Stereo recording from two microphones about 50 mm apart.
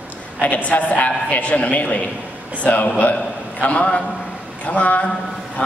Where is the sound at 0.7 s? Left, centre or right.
Left.